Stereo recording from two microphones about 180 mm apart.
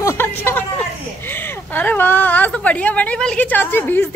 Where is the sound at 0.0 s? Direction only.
15° left (ahead or behind).